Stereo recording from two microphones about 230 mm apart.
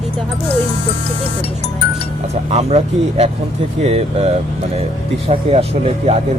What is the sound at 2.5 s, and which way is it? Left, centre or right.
Speech, right.